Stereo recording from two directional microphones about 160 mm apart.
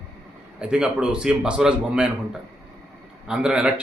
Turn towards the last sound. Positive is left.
turn(degrees=-5)  # may be behind; listen again after turning